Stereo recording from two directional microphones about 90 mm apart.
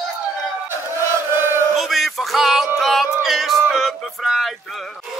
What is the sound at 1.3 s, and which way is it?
Chant, 30° right (ahead or behind).